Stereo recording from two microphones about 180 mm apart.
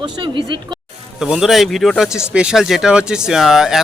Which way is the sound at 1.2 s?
5° right (ahead or behind).